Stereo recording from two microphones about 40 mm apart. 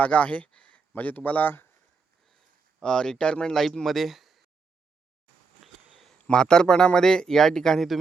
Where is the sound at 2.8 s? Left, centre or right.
Left.